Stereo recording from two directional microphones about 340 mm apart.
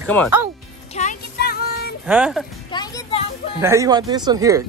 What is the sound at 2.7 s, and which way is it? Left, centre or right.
Music, centre.